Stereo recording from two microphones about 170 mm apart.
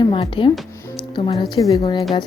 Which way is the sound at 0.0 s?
30° left (ahead or behind).